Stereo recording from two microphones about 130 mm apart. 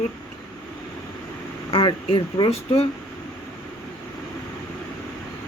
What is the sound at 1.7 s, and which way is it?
Speech, 40° left (ahead or behind).